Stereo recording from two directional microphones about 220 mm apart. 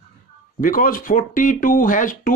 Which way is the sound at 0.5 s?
40° left (ahead or behind).